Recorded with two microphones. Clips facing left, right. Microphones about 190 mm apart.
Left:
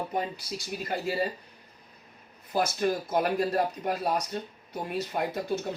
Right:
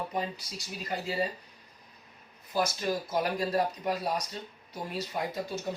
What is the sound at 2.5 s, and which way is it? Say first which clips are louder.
Speech: left 3 dB; 55° left (ahead or behind).